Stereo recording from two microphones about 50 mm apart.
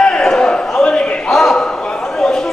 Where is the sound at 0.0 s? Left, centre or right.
Centre.